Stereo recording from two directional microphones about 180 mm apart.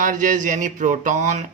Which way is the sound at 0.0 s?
45° right (ahead or behind).